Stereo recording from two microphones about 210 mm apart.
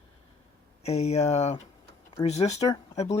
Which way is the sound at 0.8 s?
30° left (ahead or behind).